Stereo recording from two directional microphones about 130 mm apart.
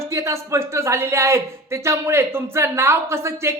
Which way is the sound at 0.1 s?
20° right (ahead or behind).